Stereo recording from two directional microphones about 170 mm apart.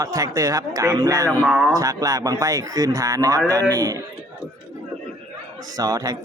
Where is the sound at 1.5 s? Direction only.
5° right (ahead or behind).